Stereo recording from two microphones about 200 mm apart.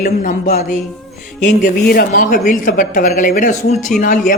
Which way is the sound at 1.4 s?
50° left (ahead or behind).